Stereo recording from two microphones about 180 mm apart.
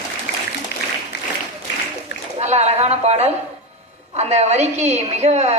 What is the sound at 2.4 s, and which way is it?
A woman's voice, 40° right (ahead or behind).